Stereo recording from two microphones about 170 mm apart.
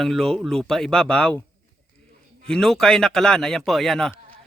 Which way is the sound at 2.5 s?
5° left (ahead or behind).